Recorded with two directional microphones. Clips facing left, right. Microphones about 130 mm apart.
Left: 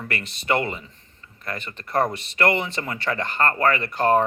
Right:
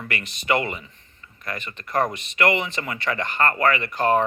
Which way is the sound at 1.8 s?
30° left (ahead or behind).